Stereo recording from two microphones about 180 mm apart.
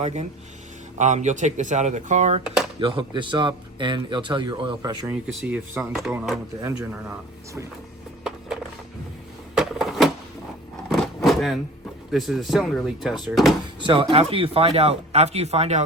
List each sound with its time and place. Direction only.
0.0 s speech: 40° right (ahead or behind)
2.8 s a man's voice: 25° right (ahead or behind); by 6.4 s 5° right (ahead or behind)
9.6 s a sound: centre (ahead or behind)
12.1 s speech: centre (ahead or behind)
13.7 s speech: 25° right (ahead or behind)